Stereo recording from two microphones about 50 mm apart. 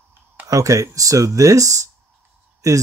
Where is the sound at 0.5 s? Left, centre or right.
Right.